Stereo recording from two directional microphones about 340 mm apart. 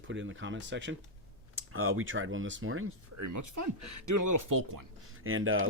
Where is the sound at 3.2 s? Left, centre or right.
Right.